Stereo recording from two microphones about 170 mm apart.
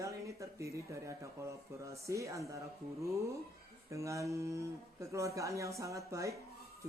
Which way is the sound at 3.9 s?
15° right (ahead or behind).